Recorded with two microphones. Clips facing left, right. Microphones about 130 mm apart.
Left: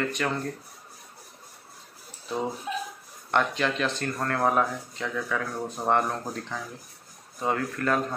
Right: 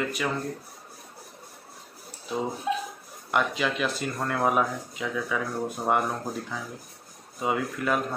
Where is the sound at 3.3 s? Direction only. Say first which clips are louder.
Left 1 dB; 5° right (ahead or behind).